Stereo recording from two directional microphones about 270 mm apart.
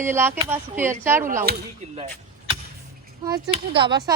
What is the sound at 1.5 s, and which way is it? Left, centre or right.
Speech, right.